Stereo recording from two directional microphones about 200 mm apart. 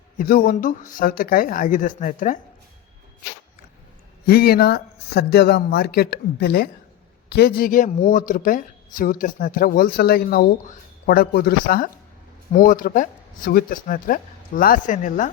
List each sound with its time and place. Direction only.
0.2 s speech: 45° left (ahead or behind)
4.3 s speech: 50° left (ahead or behind)